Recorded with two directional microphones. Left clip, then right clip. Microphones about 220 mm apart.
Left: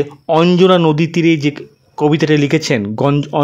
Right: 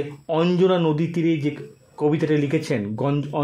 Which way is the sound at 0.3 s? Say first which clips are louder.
Left 9 dB; 35° left (ahead or behind).